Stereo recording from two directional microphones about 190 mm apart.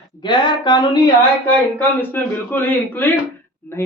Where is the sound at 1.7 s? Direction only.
10° left (ahead or behind).